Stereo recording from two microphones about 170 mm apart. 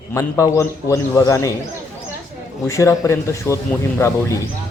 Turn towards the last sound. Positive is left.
turn(degrees=15)  # may be behind; listen again after turning